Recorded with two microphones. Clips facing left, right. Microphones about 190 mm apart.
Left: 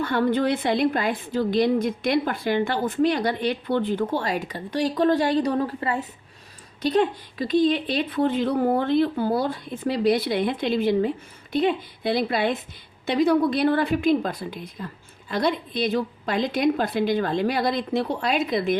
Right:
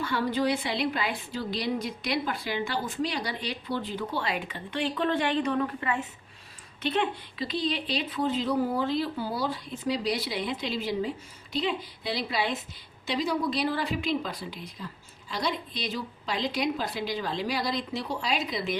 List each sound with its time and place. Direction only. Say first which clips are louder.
0.0 s a woman's voice: left 5 dB; 55° left (ahead or behind)